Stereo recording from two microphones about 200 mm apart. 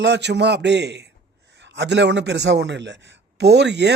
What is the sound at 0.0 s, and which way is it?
A man's voice, 60° right (ahead or behind).